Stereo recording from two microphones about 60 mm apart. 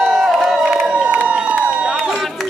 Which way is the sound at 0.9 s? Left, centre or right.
Centre.